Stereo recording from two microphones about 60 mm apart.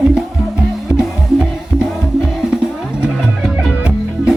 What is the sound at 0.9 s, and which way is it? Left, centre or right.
Music, centre.